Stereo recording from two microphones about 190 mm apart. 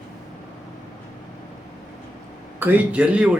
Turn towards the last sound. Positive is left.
turn(degrees=-5)  # may be behind; listen again after turning